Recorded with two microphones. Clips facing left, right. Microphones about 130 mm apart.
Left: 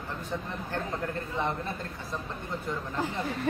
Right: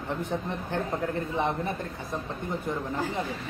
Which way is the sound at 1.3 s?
20° right (ahead or behind).